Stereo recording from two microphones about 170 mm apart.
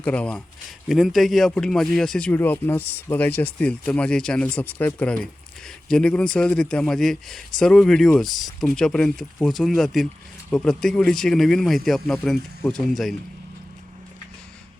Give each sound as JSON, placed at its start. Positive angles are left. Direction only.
{"t": 0.0, "sound": "speech", "side_deg": 5}